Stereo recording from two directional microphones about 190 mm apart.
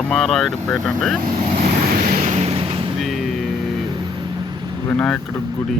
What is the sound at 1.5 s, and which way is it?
Vehicle, 50° right (ahead or behind).